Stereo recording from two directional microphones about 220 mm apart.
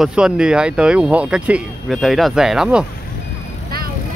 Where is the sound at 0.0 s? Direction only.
5° right (ahead or behind).